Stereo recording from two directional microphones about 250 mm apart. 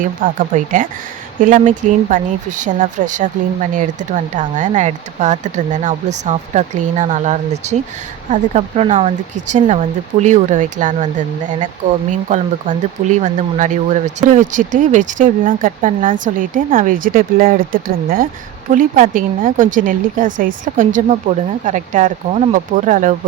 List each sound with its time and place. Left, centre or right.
0.0 s speech: right
12.3 s speech: right